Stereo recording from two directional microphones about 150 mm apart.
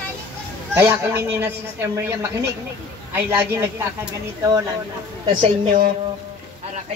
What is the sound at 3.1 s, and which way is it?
Speech, 15° right (ahead or behind).